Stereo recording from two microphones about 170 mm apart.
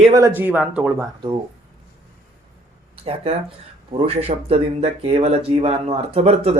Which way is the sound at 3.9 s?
35° right (ahead or behind).